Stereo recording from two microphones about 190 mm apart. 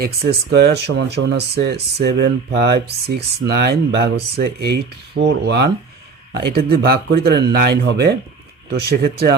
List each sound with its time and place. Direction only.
0.0 s speech: 55° right (ahead or behind)